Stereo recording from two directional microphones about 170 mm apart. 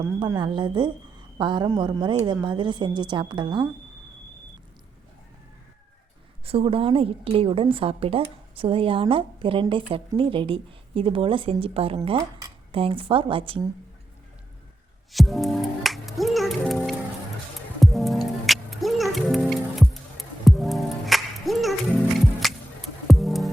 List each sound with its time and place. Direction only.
0.0 s a woman's voice: 25° right (ahead or behind)
6.4 s a woman's voice: 35° right (ahead or behind)
15.1 s music: centre (ahead or behind)
17.7 s music: centre (ahead or behind)